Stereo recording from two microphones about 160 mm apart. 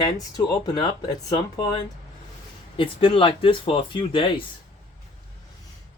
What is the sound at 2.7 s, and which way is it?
Speech, 35° left (ahead or behind).